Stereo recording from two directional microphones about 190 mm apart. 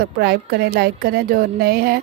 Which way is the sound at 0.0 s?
55° right (ahead or behind).